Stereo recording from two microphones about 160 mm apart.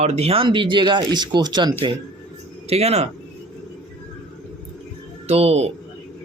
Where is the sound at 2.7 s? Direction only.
40° right (ahead or behind).